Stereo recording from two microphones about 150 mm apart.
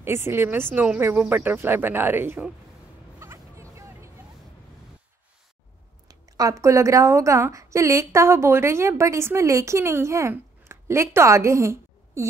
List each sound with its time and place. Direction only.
0.0 s speech: 15° right (ahead or behind)
3.2 s vehicle: 20° right (ahead or behind)
6.0 s a woman's voice: 25° right (ahead or behind)